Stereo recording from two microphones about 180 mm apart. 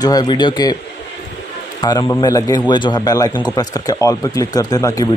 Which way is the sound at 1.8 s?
20° left (ahead or behind).